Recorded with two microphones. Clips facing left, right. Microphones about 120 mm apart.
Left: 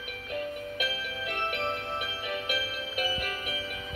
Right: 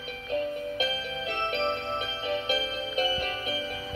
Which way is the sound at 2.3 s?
25° right (ahead or behind).